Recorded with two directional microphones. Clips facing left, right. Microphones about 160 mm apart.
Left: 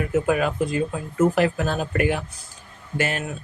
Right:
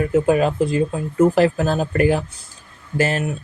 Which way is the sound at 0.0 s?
30° right (ahead or behind).